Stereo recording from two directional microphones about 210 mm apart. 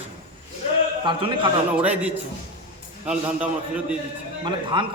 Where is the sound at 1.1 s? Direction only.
25° right (ahead or behind).